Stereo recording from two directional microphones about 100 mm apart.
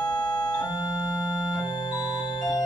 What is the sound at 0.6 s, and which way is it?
Organ, 40° left (ahead or behind).